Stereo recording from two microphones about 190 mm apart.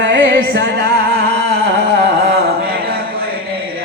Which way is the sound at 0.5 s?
60° right (ahead or behind).